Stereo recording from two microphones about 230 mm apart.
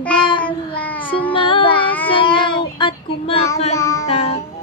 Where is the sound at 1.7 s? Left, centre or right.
Centre.